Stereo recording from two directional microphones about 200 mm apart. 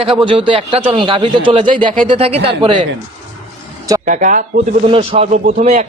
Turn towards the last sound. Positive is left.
turn(degrees=-35)  # may be behind; listen again after turning